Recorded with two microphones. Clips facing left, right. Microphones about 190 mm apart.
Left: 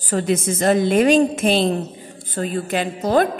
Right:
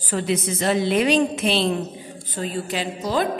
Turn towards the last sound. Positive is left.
turn(degrees=50)  # may be behind; listen again after turning